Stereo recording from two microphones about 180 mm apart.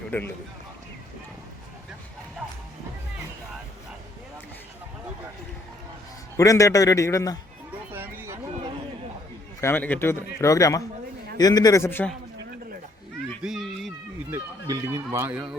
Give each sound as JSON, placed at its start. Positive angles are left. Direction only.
{"t": 0.1, "sound": "a man's voice", "side_deg": 10}
{"t": 6.3, "sound": "a man's voice", "side_deg": 15}
{"t": 7.9, "sound": "a sound", "side_deg": -10}
{"t": 9.6, "sound": "a man's voice", "side_deg": 10}
{"t": 13.4, "sound": "children playing", "side_deg": 0}
{"t": 14.3, "sound": "speech", "side_deg": -15}